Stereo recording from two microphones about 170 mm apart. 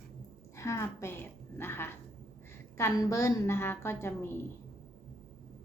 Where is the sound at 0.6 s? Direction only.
15° left (ahead or behind).